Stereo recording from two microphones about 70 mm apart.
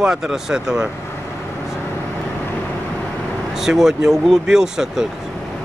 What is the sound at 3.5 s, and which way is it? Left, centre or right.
Speech, centre.